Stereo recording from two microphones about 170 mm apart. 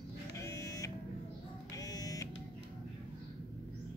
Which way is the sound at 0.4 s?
20° left (ahead or behind).